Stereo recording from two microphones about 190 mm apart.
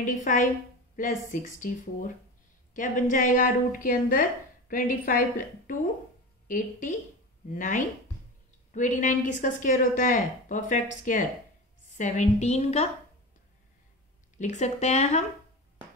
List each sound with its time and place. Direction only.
0.0 s a woman's voice: 45° left (ahead or behind)
14.4 s a woman's voice: 35° left (ahead or behind)